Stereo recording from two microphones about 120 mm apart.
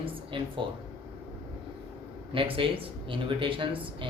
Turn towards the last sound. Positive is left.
turn(degrees=-45)  # may be behind; listen again after turning